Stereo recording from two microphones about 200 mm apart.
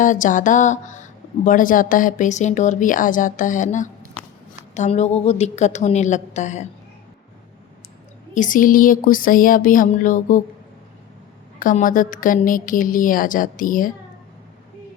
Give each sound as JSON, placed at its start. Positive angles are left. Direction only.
{"t": 0.0, "sound": "speech", "side_deg": 40}
{"t": 8.4, "sound": "a woman's voice", "side_deg": 40}
{"t": 11.6, "sound": "a woman's voice", "side_deg": 40}